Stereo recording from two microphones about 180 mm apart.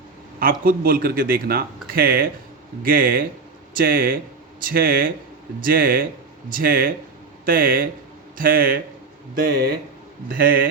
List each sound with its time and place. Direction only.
0.3 s speech: 55° right (ahead or behind)